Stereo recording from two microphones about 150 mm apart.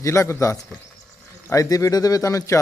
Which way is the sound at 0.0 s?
20° left (ahead or behind).